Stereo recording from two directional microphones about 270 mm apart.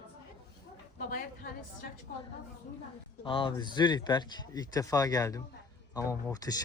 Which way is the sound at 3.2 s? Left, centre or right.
Centre.